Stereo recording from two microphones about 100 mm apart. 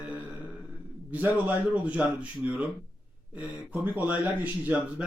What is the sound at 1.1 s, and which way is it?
Speech, 15° right (ahead or behind).